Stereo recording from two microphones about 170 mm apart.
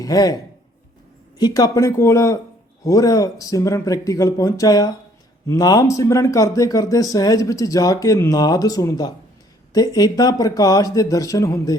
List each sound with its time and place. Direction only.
0.0 s speech: 20° left (ahead or behind)
1.4 s speech: 25° left (ahead or behind)